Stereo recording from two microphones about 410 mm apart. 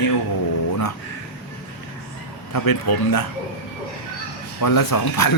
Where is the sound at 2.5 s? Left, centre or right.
Left.